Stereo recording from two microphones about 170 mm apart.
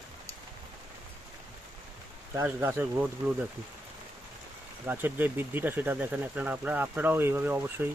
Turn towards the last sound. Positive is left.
turn(degrees=-15)  # may be behind; listen again after turning